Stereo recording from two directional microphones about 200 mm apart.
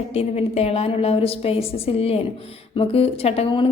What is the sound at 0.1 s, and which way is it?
A woman's voice, 30° left (ahead or behind).